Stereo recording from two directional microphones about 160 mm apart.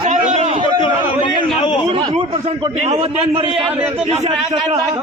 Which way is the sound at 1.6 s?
30° left (ahead or behind).